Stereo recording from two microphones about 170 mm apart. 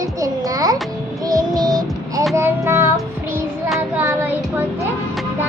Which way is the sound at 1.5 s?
20° right (ahead or behind).